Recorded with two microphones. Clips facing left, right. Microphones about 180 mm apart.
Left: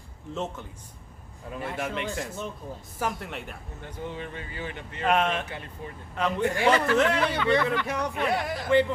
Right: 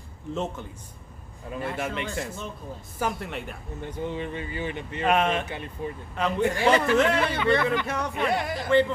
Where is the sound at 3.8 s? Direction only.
20° right (ahead or behind).